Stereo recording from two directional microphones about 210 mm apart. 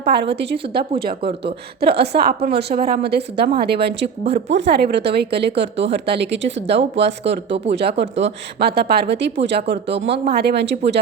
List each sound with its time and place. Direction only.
0.8 s a woman's voice: 50° right (ahead or behind)